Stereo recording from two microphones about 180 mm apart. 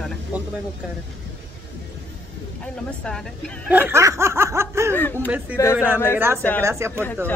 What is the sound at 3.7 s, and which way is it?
Speech, 10° right (ahead or behind).